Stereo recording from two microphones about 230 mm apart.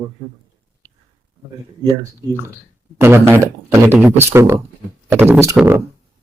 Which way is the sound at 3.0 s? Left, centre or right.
Centre.